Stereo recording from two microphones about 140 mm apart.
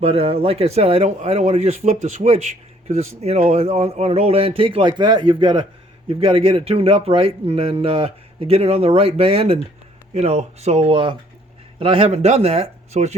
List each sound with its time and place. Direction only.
0.0 s speech: 45° right (ahead or behind)